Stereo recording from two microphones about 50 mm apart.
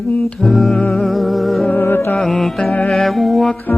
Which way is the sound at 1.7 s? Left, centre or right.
Left.